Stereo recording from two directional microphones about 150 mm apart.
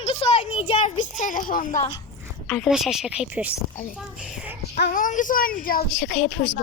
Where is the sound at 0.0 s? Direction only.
40° left (ahead or behind).